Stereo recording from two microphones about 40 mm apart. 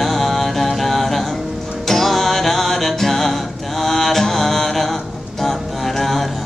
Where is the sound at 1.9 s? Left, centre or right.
Centre.